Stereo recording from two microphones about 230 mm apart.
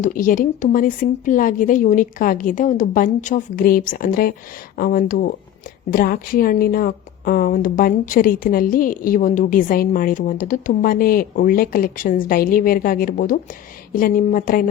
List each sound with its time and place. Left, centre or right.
0.0 s a woman's voice: left